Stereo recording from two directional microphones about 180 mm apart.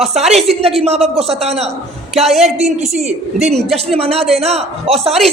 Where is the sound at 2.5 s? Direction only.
35° right (ahead or behind).